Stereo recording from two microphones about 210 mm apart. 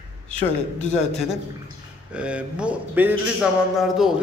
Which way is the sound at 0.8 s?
35° left (ahead or behind).